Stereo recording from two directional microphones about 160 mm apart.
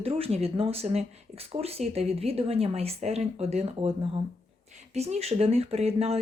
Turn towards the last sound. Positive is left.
turn(degrees=-40)  # may be behind; listen again after turning